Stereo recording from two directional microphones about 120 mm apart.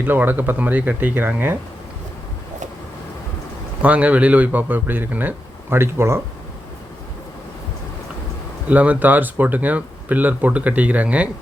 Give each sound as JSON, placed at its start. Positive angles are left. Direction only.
{"t": 0.0, "sound": "speech", "side_deg": -15}
{"t": 3.8, "sound": "speech", "side_deg": -10}
{"t": 8.7, "sound": "speech", "side_deg": -15}